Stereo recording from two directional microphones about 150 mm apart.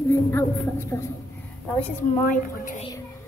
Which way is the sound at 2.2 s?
60° left (ahead or behind).